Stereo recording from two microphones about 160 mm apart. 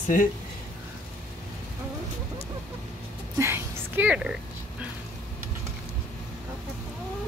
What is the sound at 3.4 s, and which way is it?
Speech, 15° right (ahead or behind).